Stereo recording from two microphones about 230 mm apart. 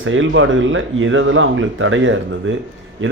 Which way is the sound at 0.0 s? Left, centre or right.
Right.